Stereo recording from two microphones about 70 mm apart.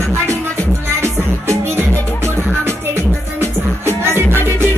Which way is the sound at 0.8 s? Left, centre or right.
Right.